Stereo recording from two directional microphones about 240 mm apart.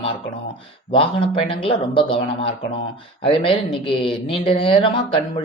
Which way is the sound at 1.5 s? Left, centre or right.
Left.